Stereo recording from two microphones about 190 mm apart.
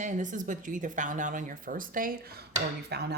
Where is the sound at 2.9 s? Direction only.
60° right (ahead or behind).